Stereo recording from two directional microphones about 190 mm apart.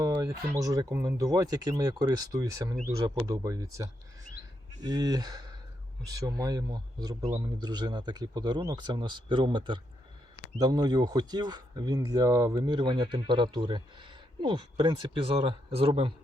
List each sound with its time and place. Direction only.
0.0 s speech: 15° right (ahead or behind)